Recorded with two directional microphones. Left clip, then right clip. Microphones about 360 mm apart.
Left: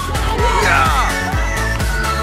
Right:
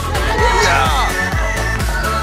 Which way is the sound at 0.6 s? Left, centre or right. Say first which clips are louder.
Even; centre.